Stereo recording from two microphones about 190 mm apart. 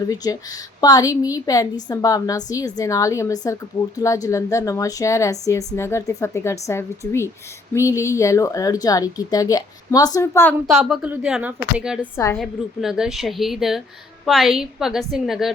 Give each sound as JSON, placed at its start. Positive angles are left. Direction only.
{"t": 0.2, "sound": "a woman's voice", "side_deg": 20}
{"t": 10.7, "sound": "a woman's voice", "side_deg": 0}
{"t": 12.1, "sound": "a woman's voice", "side_deg": 15}
{"t": 12.4, "sound": "a woman's voice", "side_deg": -5}